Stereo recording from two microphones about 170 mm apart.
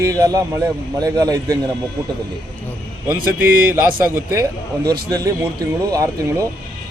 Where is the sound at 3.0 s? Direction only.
10° right (ahead or behind).